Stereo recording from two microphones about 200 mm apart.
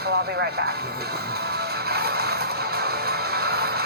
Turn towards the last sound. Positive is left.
turn(degrees=-50)  # may be behind; listen again after turning